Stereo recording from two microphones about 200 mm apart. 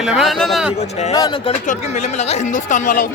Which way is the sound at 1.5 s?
35° left (ahead or behind).